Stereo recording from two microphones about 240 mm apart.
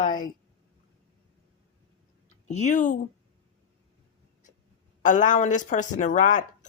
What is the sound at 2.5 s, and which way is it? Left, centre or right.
Speech, left.